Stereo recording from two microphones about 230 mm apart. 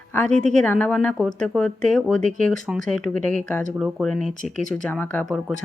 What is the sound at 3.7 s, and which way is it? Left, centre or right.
Speech, centre.